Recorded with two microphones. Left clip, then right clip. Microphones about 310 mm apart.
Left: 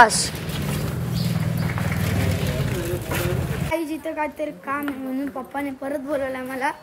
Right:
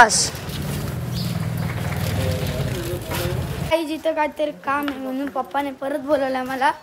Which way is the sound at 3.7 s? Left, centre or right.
Centre.